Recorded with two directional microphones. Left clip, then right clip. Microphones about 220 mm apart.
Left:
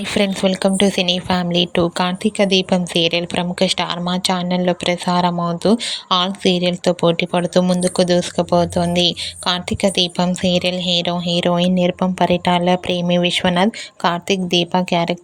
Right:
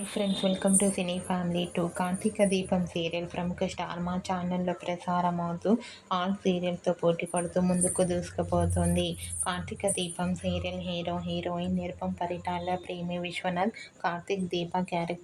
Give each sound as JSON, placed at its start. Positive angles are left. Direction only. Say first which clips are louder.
{"t": 0.1, "sound": "a woman's voice", "louder": "left 12 dB", "side_deg": 35}